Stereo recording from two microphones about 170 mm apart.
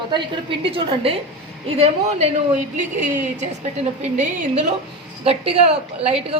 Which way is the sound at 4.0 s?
40° right (ahead or behind).